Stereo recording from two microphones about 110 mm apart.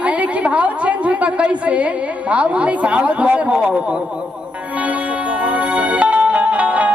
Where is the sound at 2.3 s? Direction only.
10° right (ahead or behind).